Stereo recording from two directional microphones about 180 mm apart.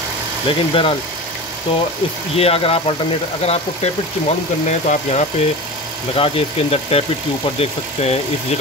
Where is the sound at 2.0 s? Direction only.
30° left (ahead or behind).